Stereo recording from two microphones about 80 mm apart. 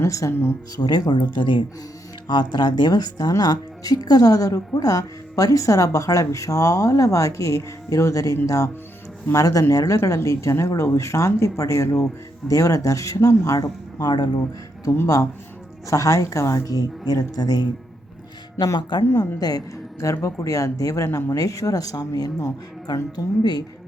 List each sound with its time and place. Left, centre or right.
0.0 s speech: left
0.8 s speech: left
2.2 s speech: left
15.0 s speech: left
18.6 s speech: left